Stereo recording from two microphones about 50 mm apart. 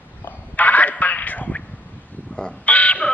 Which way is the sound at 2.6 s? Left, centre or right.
Left.